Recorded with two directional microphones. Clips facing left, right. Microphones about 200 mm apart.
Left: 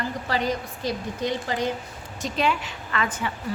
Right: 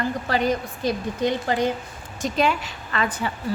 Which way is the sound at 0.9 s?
55° right (ahead or behind).